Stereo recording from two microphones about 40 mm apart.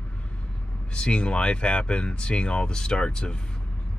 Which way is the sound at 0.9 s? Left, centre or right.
Left.